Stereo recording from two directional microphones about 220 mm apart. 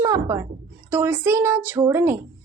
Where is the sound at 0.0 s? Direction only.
15° right (ahead or behind).